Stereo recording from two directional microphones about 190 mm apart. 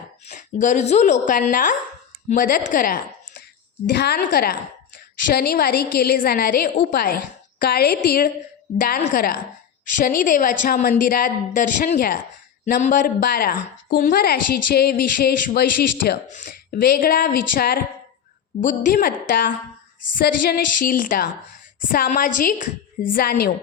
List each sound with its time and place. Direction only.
0.3 s a woman's voice: 40° left (ahead or behind)
3.9 s a woman's voice: 60° left (ahead or behind)